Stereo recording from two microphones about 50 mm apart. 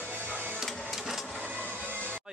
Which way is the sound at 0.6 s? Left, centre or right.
Centre.